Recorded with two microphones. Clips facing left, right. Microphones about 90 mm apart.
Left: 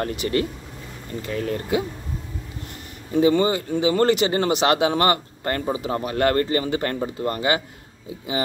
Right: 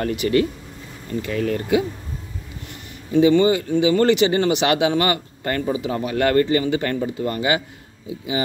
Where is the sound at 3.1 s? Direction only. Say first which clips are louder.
Right 3 dB; 40° left (ahead or behind).